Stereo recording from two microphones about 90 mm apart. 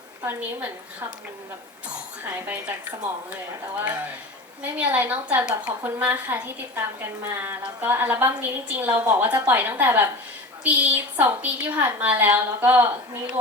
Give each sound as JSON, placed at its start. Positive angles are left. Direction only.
{"t": 2.2, "sound": "a woman's voice", "side_deg": -20}
{"t": 4.6, "sound": "a woman's voice", "side_deg": -20}